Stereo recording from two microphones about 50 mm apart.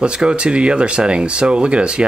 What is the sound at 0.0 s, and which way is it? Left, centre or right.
Speech, centre.